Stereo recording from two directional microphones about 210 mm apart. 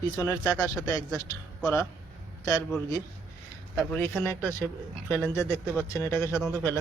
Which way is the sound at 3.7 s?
10° left (ahead or behind).